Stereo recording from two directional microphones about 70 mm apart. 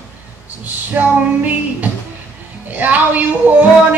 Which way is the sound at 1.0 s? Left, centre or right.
Right.